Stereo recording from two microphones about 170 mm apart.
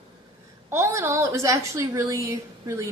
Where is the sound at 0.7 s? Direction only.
15° right (ahead or behind).